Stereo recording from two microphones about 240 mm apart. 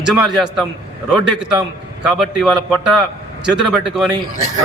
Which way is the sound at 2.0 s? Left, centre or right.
Centre.